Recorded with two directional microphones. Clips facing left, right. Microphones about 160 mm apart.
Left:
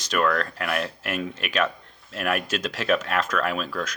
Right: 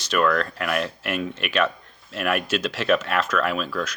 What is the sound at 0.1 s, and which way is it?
Speech, 40° left (ahead or behind).